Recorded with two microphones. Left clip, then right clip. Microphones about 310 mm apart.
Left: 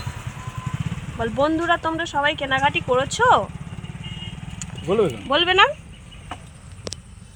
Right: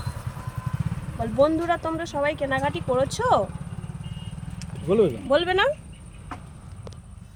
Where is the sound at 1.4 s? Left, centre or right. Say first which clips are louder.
Left 1 dB; centre.